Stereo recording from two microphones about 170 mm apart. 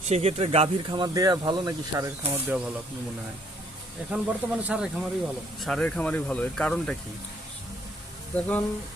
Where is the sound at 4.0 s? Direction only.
5° right (ahead or behind).